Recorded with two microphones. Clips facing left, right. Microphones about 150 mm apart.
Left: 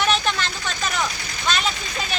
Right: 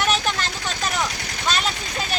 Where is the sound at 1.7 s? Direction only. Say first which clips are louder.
Right 1 dB; 55° right (ahead or behind).